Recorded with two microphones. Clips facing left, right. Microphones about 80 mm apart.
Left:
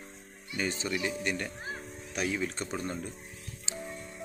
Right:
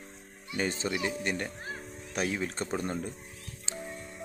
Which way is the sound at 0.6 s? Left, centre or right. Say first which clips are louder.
Right 1 dB; right.